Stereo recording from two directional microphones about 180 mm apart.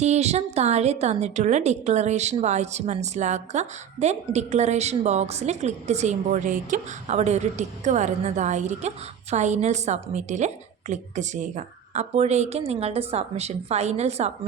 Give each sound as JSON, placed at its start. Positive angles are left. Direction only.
{"t": 0.0, "sound": "a woman's voice", "side_deg": -40}